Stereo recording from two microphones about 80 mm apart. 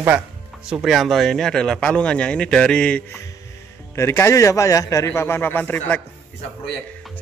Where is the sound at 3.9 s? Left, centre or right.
Left.